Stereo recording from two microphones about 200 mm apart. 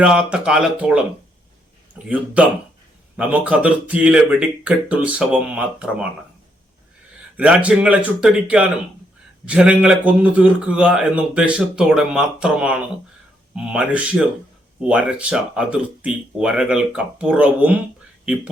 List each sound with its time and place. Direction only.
0.0 s a man's voice: 5° right (ahead or behind)
2.0 s speech: 5° right (ahead or behind)
7.3 s a man's voice: 5° right (ahead or behind)